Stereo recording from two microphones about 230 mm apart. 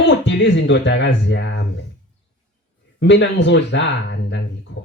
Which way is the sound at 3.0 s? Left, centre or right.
Left.